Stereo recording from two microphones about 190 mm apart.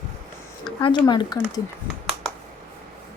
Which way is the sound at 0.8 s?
25° left (ahead or behind).